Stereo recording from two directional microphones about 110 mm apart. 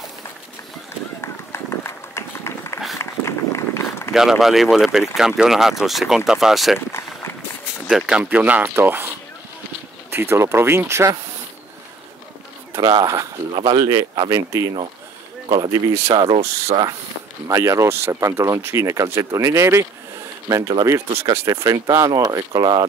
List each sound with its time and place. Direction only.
1.2 s run: 25° left (ahead or behind)
4.1 s speech: 5° right (ahead or behind)
6.9 s a sound: 25° left (ahead or behind)
7.9 s speech: 10° right (ahead or behind)
10.1 s speech: 25° right (ahead or behind)
13.0 s speech: 30° right (ahead or behind)
13.5 s speech: 45° right (ahead or behind)
16.2 s speech: 65° right (ahead or behind)
17.5 s speech: 25° right (ahead or behind)